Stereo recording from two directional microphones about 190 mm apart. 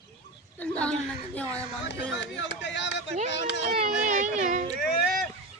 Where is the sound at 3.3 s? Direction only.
65° left (ahead or behind).